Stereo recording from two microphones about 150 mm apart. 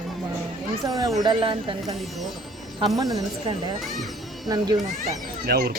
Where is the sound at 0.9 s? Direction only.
25° right (ahead or behind).